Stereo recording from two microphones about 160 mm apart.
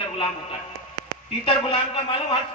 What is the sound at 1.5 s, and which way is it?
Speech, 35° left (ahead or behind).